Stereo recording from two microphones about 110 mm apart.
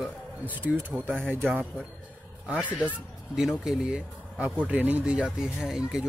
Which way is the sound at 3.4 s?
5° right (ahead or behind).